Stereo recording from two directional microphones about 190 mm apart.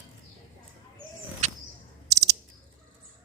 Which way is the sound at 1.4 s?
40° right (ahead or behind).